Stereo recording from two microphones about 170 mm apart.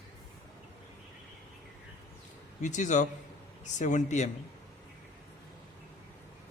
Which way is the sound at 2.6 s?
45° left (ahead or behind).